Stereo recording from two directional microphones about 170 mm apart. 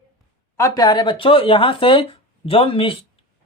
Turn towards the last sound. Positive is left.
turn(degrees=30)  # may be behind; listen again after turning